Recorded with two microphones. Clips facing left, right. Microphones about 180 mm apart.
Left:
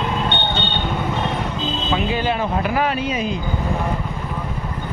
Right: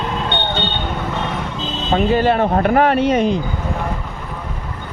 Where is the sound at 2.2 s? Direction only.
55° right (ahead or behind).